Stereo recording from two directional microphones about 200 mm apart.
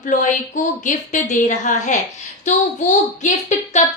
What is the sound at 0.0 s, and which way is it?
Speech, 40° left (ahead or behind).